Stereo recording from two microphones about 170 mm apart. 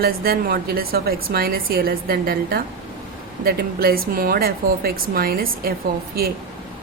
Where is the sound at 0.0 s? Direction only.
60° right (ahead or behind).